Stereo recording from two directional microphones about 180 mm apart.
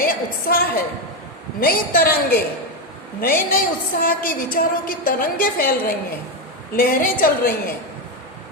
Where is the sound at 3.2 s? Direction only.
55° left (ahead or behind).